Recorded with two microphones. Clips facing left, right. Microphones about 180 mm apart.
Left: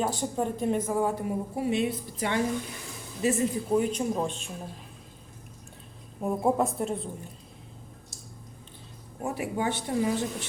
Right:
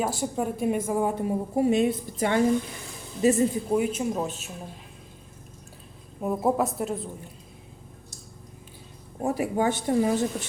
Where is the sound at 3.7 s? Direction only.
5° right (ahead or behind).